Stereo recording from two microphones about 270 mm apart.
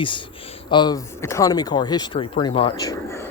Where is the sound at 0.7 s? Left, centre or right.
Centre.